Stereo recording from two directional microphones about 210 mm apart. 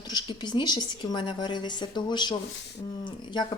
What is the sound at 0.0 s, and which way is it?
Speech, 20° left (ahead or behind).